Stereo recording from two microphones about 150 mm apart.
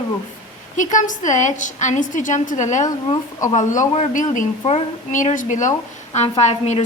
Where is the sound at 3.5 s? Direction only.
55° left (ahead or behind).